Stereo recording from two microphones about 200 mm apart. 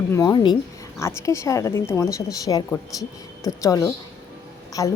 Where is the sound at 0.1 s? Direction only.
15° left (ahead or behind).